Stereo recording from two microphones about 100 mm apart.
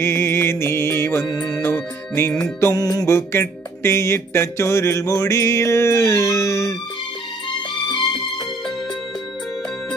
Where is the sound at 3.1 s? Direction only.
25° left (ahead or behind).